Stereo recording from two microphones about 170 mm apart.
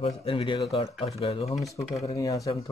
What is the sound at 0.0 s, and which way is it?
Speech, 35° left (ahead or behind).